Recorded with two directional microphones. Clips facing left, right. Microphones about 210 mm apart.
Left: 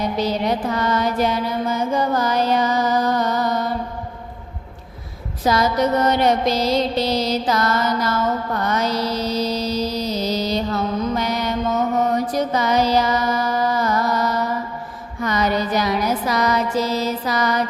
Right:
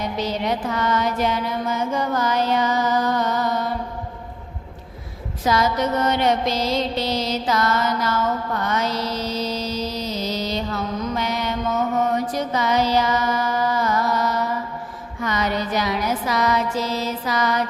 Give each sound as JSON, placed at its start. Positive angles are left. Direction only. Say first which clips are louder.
{"t": 0.2, "sound": "music", "louder": "left 2 dB", "side_deg": 35}
{"t": 5.5, "sound": "mantra", "louder": "left 2 dB", "side_deg": 35}
{"t": 15.2, "sound": "music", "louder": "left 3 dB", "side_deg": 40}